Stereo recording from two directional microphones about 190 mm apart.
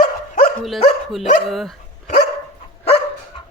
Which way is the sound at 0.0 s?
50° left (ahead or behind).